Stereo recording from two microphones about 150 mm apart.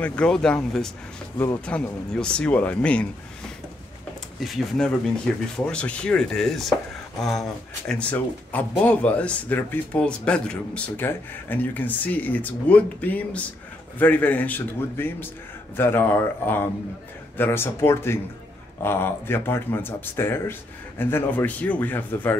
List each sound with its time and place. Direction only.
0.0 s speech: 5° left (ahead or behind)
1.7 s speech: 5° left (ahead or behind)
4.4 s speech: centre (ahead or behind)